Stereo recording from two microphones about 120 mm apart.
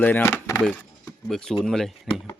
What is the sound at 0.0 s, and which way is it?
Speech, 15° left (ahead or behind).